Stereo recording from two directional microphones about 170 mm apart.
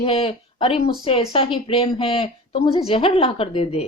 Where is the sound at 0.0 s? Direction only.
35° left (ahead or behind).